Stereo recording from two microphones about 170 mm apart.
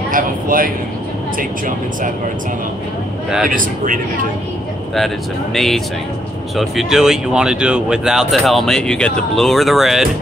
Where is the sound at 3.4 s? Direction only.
55° right (ahead or behind).